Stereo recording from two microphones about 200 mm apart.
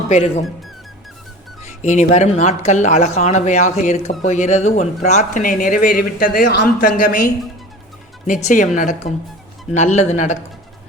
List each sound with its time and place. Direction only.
0.1 s speech: 30° left (ahead or behind)
1.8 s speech: 35° left (ahead or behind)
8.3 s speech: 40° left (ahead or behind)